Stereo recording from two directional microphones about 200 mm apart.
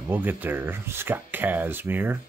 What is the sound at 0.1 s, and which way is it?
Speech, 10° right (ahead or behind).